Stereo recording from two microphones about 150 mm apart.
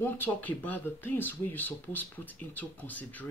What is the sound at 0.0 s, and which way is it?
Speech, 10° left (ahead or behind).